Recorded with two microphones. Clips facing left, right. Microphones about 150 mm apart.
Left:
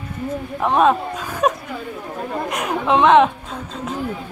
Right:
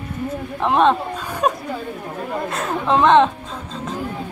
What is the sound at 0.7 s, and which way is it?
Speech, 5° left (ahead or behind).